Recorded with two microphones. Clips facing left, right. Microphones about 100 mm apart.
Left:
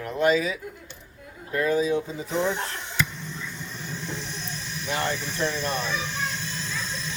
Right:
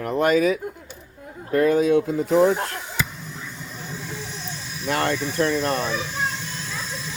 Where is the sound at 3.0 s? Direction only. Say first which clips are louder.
Left 2 dB; 5° right (ahead or behind).